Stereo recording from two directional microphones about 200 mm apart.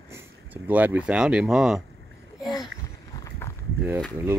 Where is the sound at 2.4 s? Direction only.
20° left (ahead or behind).